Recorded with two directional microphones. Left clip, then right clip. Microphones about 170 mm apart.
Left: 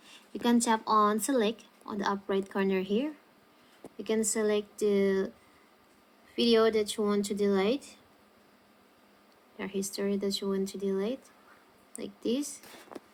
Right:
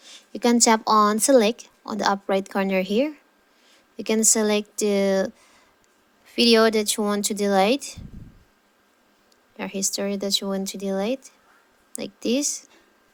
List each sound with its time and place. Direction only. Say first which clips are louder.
0.0 s a woman's voice: right 9 dB; 30° right (ahead or behind); by 7.9 s 50° right (ahead or behind)
9.6 s speech: right 7 dB; 40° right (ahead or behind)